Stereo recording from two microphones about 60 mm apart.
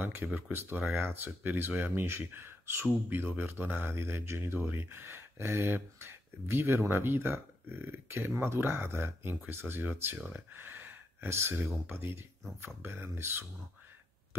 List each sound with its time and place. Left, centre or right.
0.4 s speech: right